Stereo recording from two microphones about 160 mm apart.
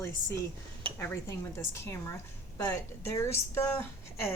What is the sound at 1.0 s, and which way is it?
Speech, 15° left (ahead or behind).